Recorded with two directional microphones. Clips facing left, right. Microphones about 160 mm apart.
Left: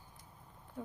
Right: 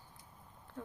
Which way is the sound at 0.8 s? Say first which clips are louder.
Left 2 dB; 10° left (ahead or behind).